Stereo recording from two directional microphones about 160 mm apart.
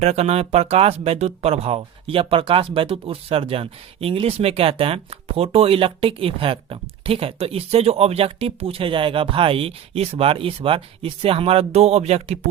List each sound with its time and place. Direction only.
0.0 s speech: 40° right (ahead or behind)